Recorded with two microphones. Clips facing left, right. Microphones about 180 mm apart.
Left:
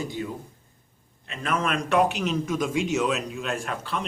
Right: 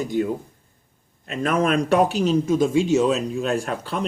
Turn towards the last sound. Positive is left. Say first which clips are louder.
# right 5 dB
turn(degrees=-40)  # may be behind; listen again after turning